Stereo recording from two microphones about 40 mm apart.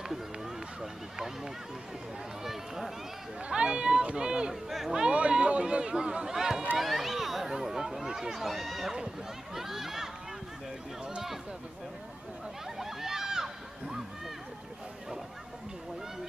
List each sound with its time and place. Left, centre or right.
1.1 s speech: centre
3.4 s speech: right
4.6 s speech: centre
5.1 s speech: right; by 10.0 s centre
12.7 s a sound: centre